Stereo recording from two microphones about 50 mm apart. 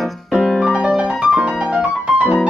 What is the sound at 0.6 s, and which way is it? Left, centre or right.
Music, centre.